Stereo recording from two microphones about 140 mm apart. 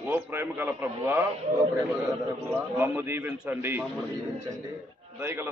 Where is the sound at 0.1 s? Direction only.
15° right (ahead or behind).